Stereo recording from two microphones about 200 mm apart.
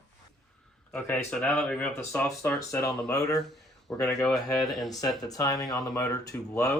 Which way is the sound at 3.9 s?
5° left (ahead or behind).